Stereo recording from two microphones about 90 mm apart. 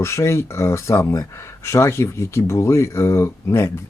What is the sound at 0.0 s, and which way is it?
Speech, 30° left (ahead or behind).